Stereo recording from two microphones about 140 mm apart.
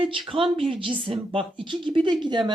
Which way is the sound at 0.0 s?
40° right (ahead or behind).